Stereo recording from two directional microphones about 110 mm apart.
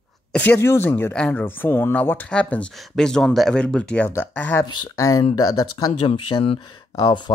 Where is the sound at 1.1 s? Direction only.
10° left (ahead or behind).